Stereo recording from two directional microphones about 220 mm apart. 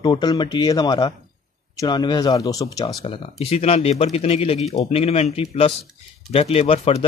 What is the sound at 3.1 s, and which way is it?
Speech, 25° left (ahead or behind).